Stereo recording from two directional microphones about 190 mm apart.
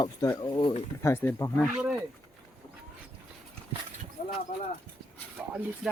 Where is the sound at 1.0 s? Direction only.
10° left (ahead or behind).